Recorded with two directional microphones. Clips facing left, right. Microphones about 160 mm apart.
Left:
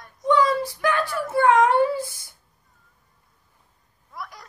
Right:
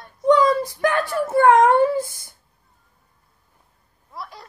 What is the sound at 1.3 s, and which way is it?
Wail, 45° right (ahead or behind).